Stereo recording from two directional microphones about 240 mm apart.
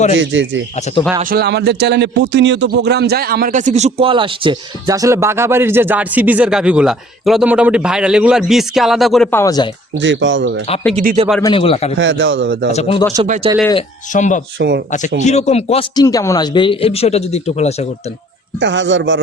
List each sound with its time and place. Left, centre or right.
0.2 s a man's voice: right
1.2 s a man's voice: right; by 9.6 s centre
10.0 s a man's voice: right
10.9 s speech: right
11.4 s speech: left
11.9 s a man's voice: right
12.7 s speech: left
13.2 s speech: right
14.1 s speech: left
18.6 s a man's voice: right